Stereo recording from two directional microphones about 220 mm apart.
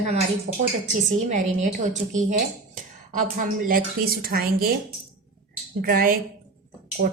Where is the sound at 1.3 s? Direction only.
35° right (ahead or behind).